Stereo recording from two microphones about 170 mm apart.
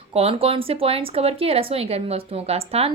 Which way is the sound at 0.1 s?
35° right (ahead or behind).